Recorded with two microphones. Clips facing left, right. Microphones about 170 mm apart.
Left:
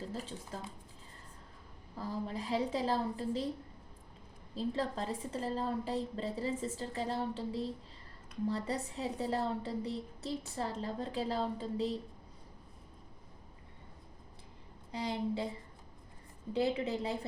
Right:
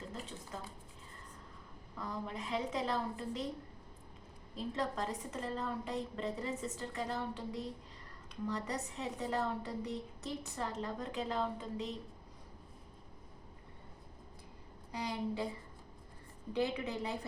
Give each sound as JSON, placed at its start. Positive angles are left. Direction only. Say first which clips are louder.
{"t": 2.0, "sound": "a woman's voice", "louder": "left 3 dB", "side_deg": 30}
{"t": 4.5, "sound": "a woman's voice", "louder": "left 3 dB", "side_deg": 30}
{"t": 14.9, "sound": "a woman's voice", "louder": "left 2 dB", "side_deg": 30}
{"t": 16.5, "sound": "a woman's voice", "louder": "left 3 dB", "side_deg": 30}